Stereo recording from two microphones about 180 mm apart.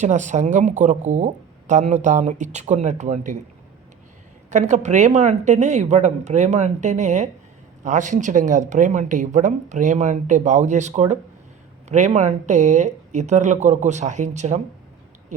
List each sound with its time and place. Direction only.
0.0 s speech: 40° right (ahead or behind)
4.5 s speech: 40° right (ahead or behind)